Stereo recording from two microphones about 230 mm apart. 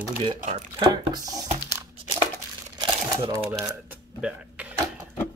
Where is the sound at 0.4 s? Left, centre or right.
Right.